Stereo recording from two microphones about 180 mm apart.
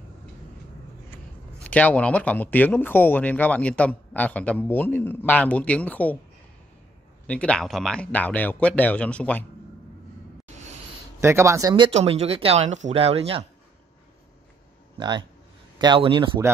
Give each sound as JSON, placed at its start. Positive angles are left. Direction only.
{"t": 1.6, "sound": "speech", "side_deg": 5}
{"t": 7.2, "sound": "speech", "side_deg": 5}
{"t": 11.1, "sound": "speech", "side_deg": -15}
{"t": 15.0, "sound": "speech", "side_deg": -25}